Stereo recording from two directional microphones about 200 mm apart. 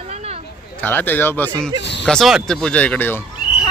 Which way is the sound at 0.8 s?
10° left (ahead or behind).